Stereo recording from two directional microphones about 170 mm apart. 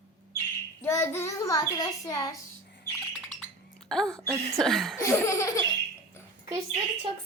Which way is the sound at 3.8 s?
5° left (ahead or behind).